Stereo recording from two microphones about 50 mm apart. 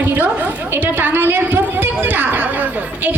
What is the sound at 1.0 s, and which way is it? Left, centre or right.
Speech, right.